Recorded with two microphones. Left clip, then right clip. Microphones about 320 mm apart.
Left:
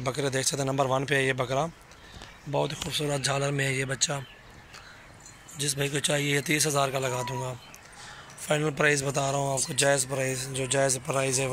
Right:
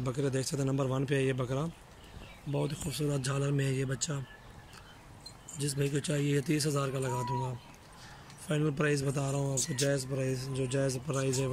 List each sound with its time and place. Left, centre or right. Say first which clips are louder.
0.0 s a man's voice: left 6 dB; centre
5.6 s a man's voice: left 5 dB; centre
8.5 s a man's voice: left 7 dB; centre